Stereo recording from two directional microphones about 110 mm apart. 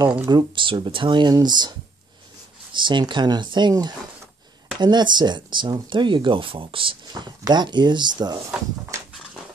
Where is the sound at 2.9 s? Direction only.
45° right (ahead or behind).